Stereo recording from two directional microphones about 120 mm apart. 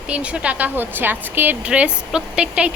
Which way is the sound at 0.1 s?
10° right (ahead or behind).